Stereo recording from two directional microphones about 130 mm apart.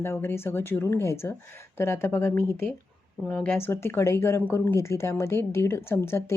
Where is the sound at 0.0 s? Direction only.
20° left (ahead or behind).